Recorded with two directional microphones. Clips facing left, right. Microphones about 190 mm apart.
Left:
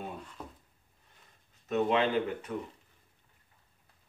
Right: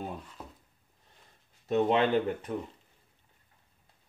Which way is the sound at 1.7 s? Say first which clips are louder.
Right 3 dB; 35° right (ahead or behind).